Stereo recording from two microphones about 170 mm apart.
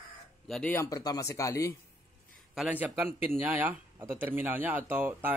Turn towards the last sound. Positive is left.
turn(degrees=-10)  # may be behind; listen again after turning